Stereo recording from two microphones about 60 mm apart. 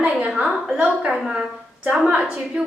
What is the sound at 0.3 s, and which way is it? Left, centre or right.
A woman's voice, centre.